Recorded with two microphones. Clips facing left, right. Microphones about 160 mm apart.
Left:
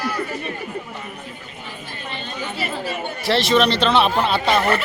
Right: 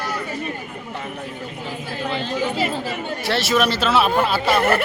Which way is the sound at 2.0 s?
90° right.